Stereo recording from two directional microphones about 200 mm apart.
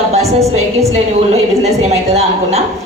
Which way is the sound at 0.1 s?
35° right (ahead or behind).